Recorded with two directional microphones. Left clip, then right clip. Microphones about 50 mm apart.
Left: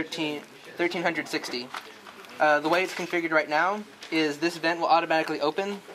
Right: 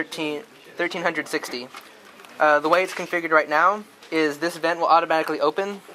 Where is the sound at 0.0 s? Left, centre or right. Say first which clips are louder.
Right 3 dB; right.